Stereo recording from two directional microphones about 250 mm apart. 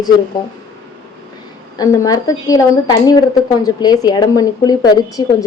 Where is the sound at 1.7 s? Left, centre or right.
Centre.